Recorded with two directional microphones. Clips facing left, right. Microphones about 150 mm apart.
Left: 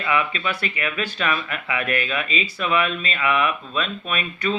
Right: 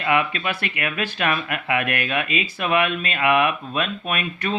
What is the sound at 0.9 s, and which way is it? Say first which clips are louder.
A man's voice: right 2 dB; 50° right (ahead or behind).